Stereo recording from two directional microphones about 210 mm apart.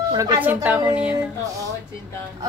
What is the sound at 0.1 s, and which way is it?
A woman's voice, 15° right (ahead or behind).